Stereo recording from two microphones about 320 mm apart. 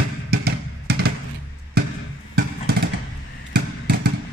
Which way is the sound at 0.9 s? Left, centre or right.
Right.